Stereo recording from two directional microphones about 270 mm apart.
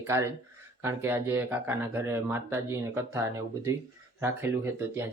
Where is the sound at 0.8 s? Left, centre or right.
Centre.